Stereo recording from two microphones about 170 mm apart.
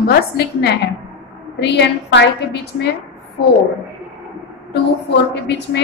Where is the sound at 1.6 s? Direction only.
85° left.